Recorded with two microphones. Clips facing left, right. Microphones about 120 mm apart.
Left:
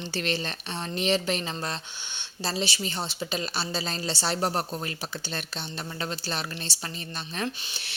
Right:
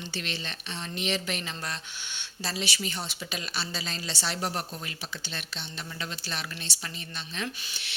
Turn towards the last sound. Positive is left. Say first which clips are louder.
# left 4 dB
turn(degrees=30)  # may be behind; listen again after turning